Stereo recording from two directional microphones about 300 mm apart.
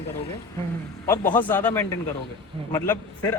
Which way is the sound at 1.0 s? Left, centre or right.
Centre.